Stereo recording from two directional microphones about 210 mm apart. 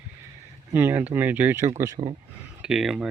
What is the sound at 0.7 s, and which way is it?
Speech, 10° right (ahead or behind).